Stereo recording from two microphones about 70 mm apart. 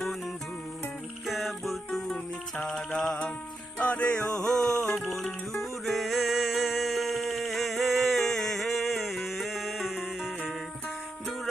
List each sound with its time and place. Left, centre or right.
1.3 s music: centre
3.8 s music: centre
4.7 s music: left
4.9 s music: centre